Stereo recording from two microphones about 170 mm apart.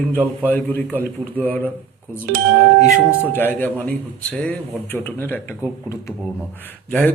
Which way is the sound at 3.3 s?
10° left (ahead or behind).